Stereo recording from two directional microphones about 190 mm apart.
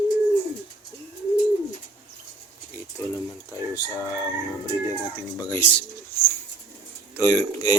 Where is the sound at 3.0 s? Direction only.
15° left (ahead or behind).